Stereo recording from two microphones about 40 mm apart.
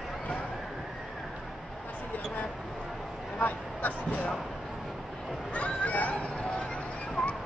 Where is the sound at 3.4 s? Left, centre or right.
Left.